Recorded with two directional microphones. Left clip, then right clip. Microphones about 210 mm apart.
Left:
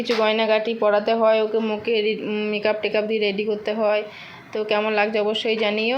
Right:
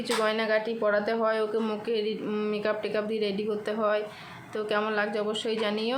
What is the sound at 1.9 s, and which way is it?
Speech, 30° right (ahead or behind).